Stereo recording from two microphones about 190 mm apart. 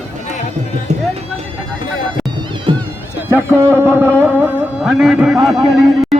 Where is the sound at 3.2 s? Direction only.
15° right (ahead or behind).